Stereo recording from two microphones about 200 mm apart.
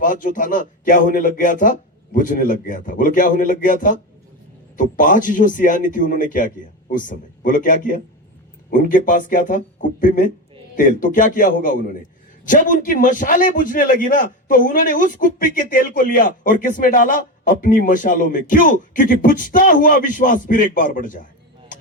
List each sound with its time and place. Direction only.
0.0 s a man's voice: 40° left (ahead or behind)